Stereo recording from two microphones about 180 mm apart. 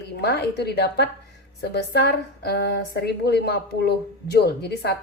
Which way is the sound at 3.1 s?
65° left (ahead or behind).